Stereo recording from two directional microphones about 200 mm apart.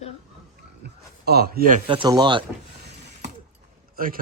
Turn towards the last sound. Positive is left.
turn(degrees=-45)  # may be behind; listen again after turning